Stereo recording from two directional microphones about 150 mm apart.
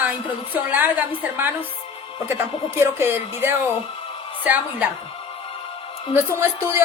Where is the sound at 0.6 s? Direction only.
10° right (ahead or behind).